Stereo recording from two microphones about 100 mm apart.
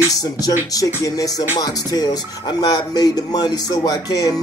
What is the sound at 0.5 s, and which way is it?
Music, 35° left (ahead or behind).